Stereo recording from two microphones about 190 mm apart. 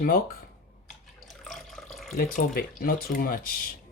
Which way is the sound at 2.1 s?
50° left (ahead or behind).